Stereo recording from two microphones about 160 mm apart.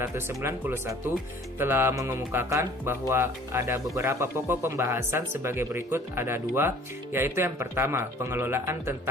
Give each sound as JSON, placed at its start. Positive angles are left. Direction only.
{"t": 0.0, "sound": "speech", "side_deg": -15}